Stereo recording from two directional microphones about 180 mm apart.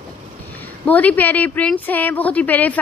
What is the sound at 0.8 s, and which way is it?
A woman's voice, 10° left (ahead or behind).